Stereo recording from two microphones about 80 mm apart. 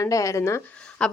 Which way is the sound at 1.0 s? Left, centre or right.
Centre.